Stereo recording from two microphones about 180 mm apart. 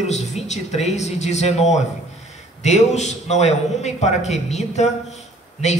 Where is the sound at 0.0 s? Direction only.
40° left (ahead or behind).